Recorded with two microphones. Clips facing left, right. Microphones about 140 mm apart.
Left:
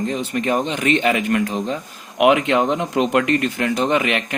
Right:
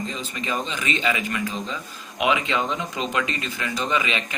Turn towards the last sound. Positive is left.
turn(degrees=65)  # may be behind; listen again after turning